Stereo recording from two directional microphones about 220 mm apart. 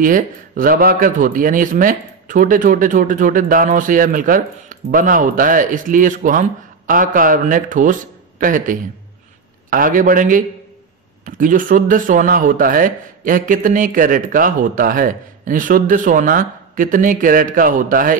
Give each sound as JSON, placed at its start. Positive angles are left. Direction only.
{"t": 0.0, "sound": "speech", "side_deg": -40}